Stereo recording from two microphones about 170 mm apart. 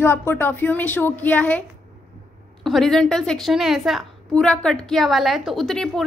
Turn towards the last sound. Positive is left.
turn(degrees=0)  # may be behind; listen again after turning